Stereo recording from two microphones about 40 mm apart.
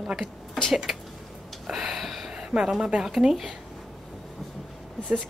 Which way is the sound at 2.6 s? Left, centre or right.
Centre.